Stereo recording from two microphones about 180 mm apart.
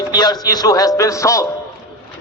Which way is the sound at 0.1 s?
20° left (ahead or behind).